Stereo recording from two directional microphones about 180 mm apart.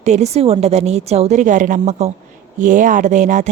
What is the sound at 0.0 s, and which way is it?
A woman's voice, 40° right (ahead or behind).